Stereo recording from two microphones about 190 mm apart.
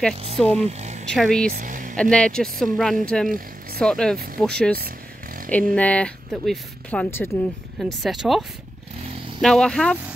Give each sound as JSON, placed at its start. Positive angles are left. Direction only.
{"t": 0.6, "sound": "speech", "side_deg": -35}
{"t": 1.1, "sound": "speech", "side_deg": 0}
{"t": 1.5, "sound": "vehicle", "side_deg": -45}
{"t": 2.0, "sound": "speech", "side_deg": 5}
{"t": 7.8, "sound": "speech", "side_deg": 0}